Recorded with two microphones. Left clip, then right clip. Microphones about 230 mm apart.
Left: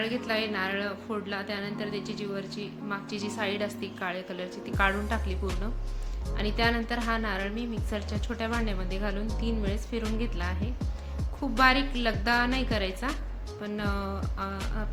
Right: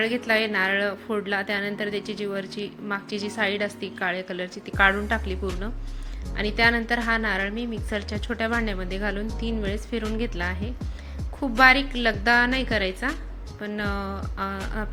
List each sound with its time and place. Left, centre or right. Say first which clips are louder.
0.0 s a woman's voice: right 7 dB; right